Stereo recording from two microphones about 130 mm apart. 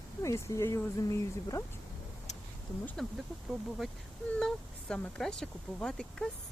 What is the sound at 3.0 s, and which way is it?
Speech, 5° left (ahead or behind).